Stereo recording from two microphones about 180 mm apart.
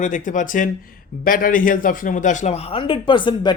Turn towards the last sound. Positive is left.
turn(degrees=25)  # may be behind; listen again after turning